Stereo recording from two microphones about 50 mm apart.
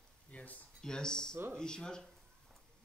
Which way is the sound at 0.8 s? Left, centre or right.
Centre.